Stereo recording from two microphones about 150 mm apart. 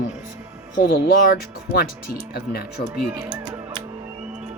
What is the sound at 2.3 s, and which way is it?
Speech, 90° left.